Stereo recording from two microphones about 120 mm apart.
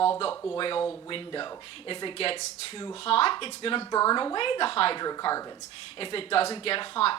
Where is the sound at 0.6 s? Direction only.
45° left (ahead or behind).